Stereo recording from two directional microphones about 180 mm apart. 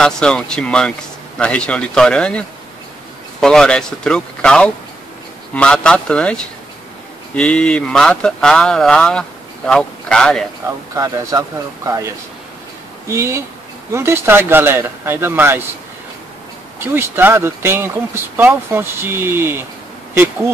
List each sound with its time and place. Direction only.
0.0 s speech: 5° left (ahead or behind)
10.7 s speech: 15° right (ahead or behind)
13.1 s speech: 15° right (ahead or behind)
16.8 s speech: 10° right (ahead or behind)